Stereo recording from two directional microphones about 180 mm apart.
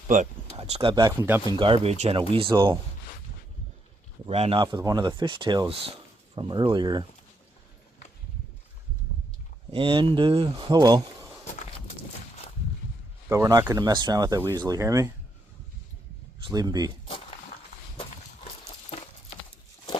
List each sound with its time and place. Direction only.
0.1 s speech: 45° right (ahead or behind)
0.5 s speech: 35° right (ahead or behind); by 1.5 s 15° right (ahead or behind)
1.5 s speech: 30° right (ahead or behind)
4.3 s speech: 35° right (ahead or behind)
9.7 s speech: 30° right (ahead or behind)
13.3 s speech: 15° right (ahead or behind)
16.5 s speech: 20° right (ahead or behind)